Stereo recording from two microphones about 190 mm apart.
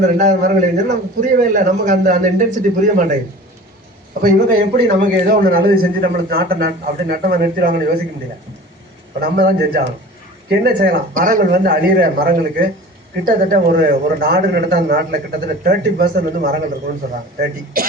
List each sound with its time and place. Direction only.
0.2 s a man's voice: 45° right (ahead or behind)
4.2 s a man's voice: 45° right (ahead or behind)
9.2 s a man's voice: 50° right (ahead or behind)